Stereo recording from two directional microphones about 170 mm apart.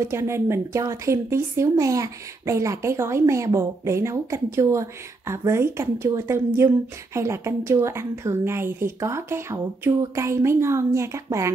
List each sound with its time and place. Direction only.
0.0 s speech: 15° right (ahead or behind)